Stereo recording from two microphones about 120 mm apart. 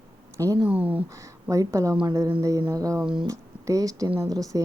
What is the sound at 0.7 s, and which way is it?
Speech, 10° right (ahead or behind).